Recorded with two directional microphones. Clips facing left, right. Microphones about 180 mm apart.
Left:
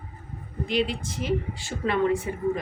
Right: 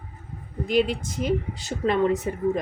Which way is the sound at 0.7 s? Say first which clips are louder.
Right 4 dB; 45° right (ahead or behind).